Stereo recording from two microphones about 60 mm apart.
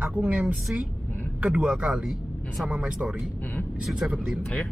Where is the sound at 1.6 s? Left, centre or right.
Centre.